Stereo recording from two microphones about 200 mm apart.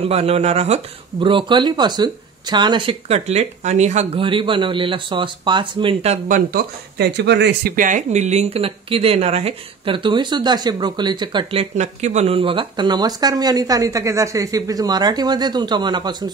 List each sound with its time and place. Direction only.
0.0 s speech: 30° right (ahead or behind)
6.2 s speech: 45° right (ahead or behind); by 11.6 s 25° right (ahead or behind)
11.7 s speech: 35° right (ahead or behind)